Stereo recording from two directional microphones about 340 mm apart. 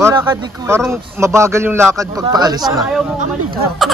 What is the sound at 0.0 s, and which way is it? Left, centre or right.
A man's voice, centre.